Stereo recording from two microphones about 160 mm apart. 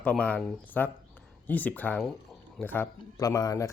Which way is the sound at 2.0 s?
Centre (ahead or behind).